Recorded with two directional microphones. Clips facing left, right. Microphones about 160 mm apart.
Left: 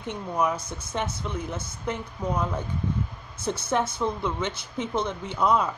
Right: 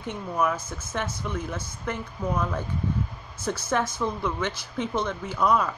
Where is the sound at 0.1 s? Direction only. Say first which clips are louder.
Even; 20° left (ahead or behind).